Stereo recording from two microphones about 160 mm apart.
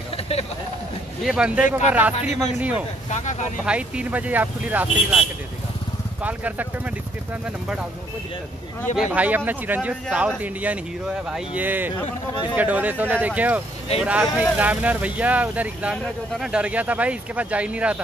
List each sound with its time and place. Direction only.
1.2 s speech: 5° right (ahead or behind)
3.1 s speech: 45° left (ahead or behind)
3.6 s speech: 5° right (ahead or behind)
6.2 s speech: 10° right (ahead or behind)
8.9 s speech: 10° right (ahead or behind)